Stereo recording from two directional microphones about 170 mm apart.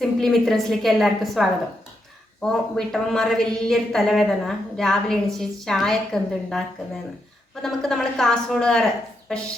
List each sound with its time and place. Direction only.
0.0 s a woman's voice: centre (ahead or behind)
7.6 s a woman's voice: centre (ahead or behind)